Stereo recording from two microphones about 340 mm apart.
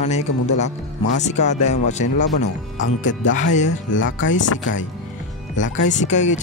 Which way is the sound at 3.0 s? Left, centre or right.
Left.